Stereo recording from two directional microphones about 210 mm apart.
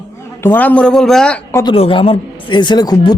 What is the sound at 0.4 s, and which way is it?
Speech, 10° left (ahead or behind).